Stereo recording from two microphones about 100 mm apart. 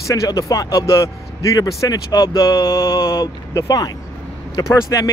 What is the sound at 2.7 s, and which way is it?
Speech, 30° left (ahead or behind).